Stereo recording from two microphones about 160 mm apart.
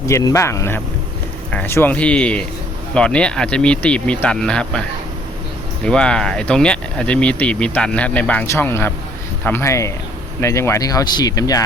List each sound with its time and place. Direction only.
0.0 s speech: 20° left (ahead or behind)
5.8 s speech: 5° left (ahead or behind); by 11.6 s 25° left (ahead or behind)